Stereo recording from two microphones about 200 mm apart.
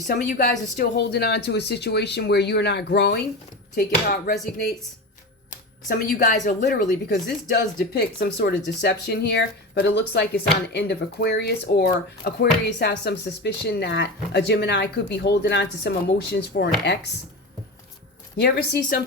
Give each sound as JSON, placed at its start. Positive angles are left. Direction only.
{"t": 0.1, "sound": "speech", "side_deg": 45}
{"t": 0.8, "sound": "speech", "side_deg": 55}
{"t": 3.8, "sound": "speech", "side_deg": 45}
{"t": 6.7, "sound": "speech", "side_deg": 50}
{"t": 18.3, "sound": "speech", "side_deg": 55}